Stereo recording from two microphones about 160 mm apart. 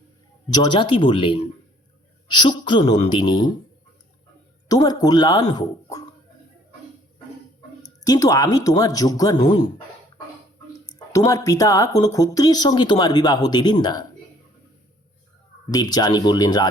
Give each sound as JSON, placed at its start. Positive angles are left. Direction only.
{"t": 0.5, "sound": "speech", "side_deg": 25}
{"t": 4.7, "sound": "speech", "side_deg": 25}
{"t": 7.8, "sound": "speech", "side_deg": 20}
{"t": 11.1, "sound": "speech", "side_deg": 20}
{"t": 15.7, "sound": "speech", "side_deg": 25}